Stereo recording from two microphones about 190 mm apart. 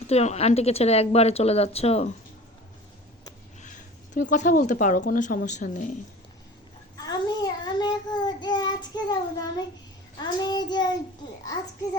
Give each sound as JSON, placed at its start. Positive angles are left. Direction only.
{"t": 0.1, "sound": "a woman's voice", "side_deg": 35}
{"t": 3.6, "sound": "speech", "side_deg": 40}
{"t": 6.9, "sound": "child singing", "side_deg": 20}